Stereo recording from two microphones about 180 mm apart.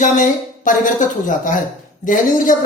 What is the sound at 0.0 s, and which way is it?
A woman's voice, 45° left (ahead or behind).